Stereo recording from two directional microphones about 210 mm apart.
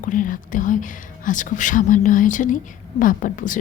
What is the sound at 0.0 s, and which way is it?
Speech, 40° left (ahead or behind).